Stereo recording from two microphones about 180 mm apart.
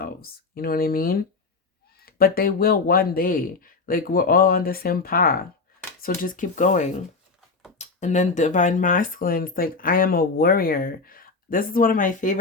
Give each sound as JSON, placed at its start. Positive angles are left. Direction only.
{"t": 0.0, "sound": "speech", "side_deg": 55}